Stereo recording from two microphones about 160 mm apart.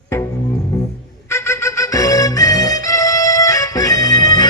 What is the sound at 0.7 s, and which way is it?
Music, 15° left (ahead or behind).